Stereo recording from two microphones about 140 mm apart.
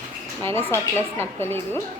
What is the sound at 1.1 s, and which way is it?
Speech, 15° left (ahead or behind).